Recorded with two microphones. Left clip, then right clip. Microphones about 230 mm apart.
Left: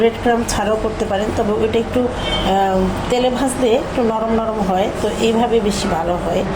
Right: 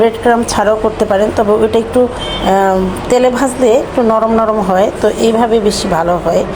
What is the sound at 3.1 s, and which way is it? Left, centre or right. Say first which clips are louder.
Speech: right 8 dB; right.